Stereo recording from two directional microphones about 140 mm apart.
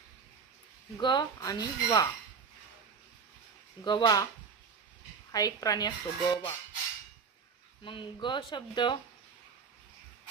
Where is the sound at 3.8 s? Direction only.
30° left (ahead or behind).